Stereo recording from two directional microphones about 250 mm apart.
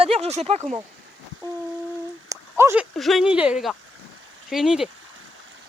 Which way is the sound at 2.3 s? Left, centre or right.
Centre.